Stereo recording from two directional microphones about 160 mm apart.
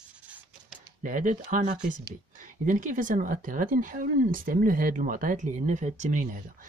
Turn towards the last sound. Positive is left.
turn(degrees=-55)  # may be behind; listen again after turning